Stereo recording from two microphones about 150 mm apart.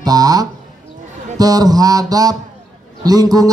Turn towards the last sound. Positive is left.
turn(degrees=-25)  # may be behind; listen again after turning